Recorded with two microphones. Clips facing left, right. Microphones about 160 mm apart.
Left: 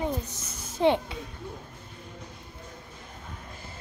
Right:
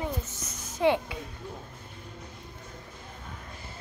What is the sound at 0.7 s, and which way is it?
Speech, 25° left (ahead or behind).